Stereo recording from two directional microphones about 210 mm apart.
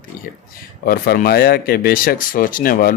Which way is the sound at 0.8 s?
45° left (ahead or behind).